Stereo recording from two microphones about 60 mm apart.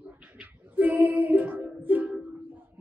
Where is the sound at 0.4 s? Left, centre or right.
Right.